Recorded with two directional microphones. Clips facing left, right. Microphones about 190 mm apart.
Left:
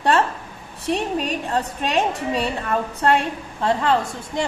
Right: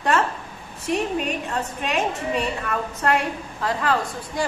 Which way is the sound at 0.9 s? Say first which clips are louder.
Left 1 dB; 30° left (ahead or behind).